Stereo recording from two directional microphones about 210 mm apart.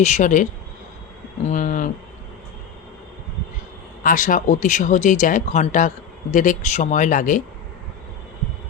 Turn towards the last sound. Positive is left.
turn(degrees=40)  # may be behind; listen again after turning